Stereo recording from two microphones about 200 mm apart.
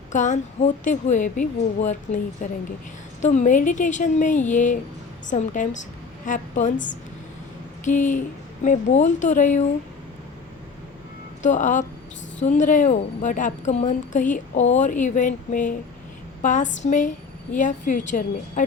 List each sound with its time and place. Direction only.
0.1 s a woman's voice: 40° left (ahead or behind)
11.4 s a woman's voice: 40° left (ahead or behind)